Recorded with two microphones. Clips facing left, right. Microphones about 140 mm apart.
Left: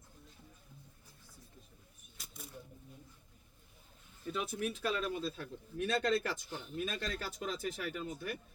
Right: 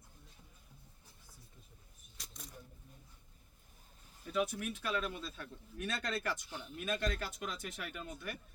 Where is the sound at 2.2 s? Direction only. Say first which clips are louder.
Left 2 dB; 5° left (ahead or behind).